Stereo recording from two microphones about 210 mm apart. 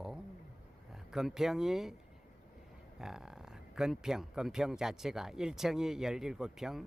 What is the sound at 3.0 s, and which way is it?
Speech, centre (ahead or behind).